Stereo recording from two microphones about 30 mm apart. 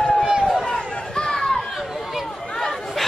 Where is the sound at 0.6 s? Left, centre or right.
Left.